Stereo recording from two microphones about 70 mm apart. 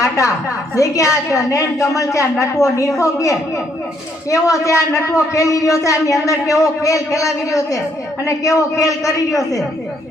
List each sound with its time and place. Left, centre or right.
0.0 s a man's voice: left